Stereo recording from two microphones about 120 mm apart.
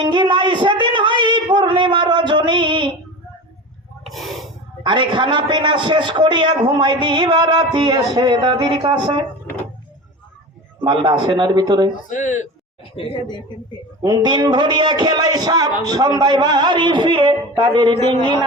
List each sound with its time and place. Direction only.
0.0 s a sound: 40° right (ahead or behind)
4.0 s snort: centre (ahead or behind)
4.8 s a man's voice: 40° right (ahead or behind)
10.8 s a man's voice: 40° right (ahead or behind)
12.0 s speech: 90° left
12.8 s a man's voice: 50° left (ahead or behind)
14.0 s a man's voice: 40° right (ahead or behind)